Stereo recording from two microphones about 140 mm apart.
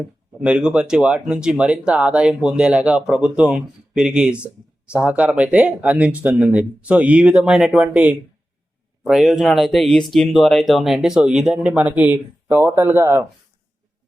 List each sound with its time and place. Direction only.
0.4 s speech: 10° right (ahead or behind)